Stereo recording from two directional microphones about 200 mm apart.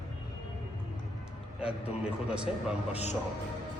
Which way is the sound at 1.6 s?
5° right (ahead or behind).